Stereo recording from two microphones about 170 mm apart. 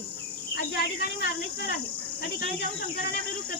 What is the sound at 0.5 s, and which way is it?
Speech, 75° left (ahead or behind).